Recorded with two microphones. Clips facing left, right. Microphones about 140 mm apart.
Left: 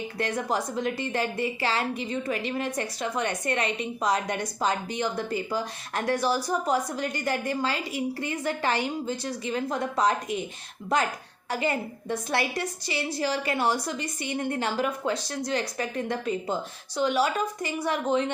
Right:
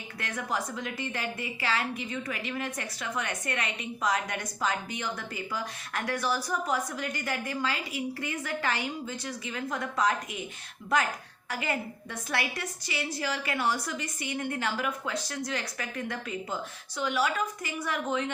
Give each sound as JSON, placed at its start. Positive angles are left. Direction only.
{"t": 0.2, "sound": "a woman's voice", "side_deg": 35}
{"t": 11.4, "sound": "a woman's voice", "side_deg": 30}